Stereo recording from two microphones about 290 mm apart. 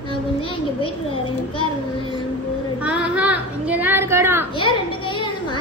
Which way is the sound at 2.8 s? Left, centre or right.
Centre.